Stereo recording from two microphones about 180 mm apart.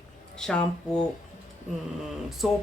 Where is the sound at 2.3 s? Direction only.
Centre (ahead or behind).